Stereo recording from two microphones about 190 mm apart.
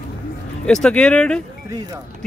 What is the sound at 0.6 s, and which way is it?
Speech, 5° left (ahead or behind).